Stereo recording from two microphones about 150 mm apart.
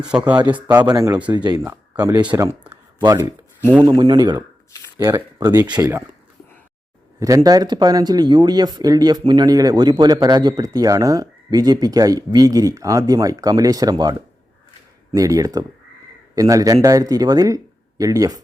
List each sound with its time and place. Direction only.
0.0 s speech: 5° right (ahead or behind)
0.9 s speech: 25° right (ahead or behind)
4.9 s speech: 15° right (ahead or behind)
5.4 s speech: 25° right (ahead or behind)
7.2 s speech: 20° right (ahead or behind)
15.1 s a man's voice: 20° right (ahead or behind)